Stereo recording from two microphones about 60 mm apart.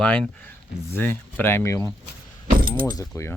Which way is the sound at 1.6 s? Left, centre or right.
Left.